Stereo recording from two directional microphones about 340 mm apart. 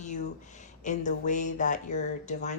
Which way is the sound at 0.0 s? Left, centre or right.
Left.